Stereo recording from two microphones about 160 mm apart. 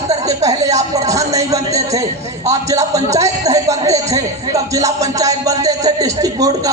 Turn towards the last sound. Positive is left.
turn(degrees=-20)  # may be behind; listen again after turning